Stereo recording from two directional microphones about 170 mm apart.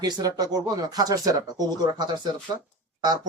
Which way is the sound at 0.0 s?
20° right (ahead or behind).